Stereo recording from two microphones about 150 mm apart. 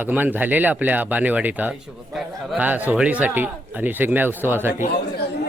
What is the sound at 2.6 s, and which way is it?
Speech, 10° right (ahead or behind).